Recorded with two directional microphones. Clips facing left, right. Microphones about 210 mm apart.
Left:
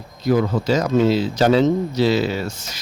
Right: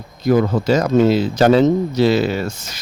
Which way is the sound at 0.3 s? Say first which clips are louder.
Right 3 dB; 50° right (ahead or behind).